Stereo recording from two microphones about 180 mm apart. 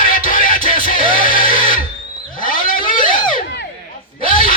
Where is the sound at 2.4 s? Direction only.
50° left (ahead or behind).